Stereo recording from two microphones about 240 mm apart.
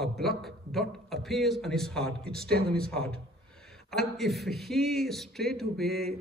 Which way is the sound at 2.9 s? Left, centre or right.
Centre.